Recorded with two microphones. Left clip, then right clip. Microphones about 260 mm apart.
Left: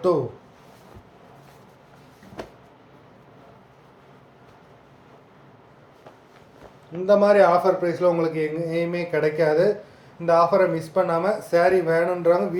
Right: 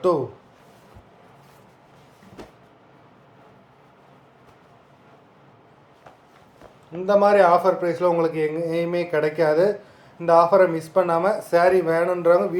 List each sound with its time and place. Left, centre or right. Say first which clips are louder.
6.9 s a man's voice: even; centre